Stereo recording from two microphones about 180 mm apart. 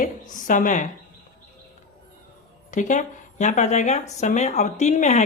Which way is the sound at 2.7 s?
45° left (ahead or behind).